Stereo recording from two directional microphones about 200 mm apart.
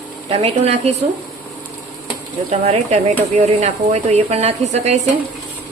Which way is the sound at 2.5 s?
35° right (ahead or behind).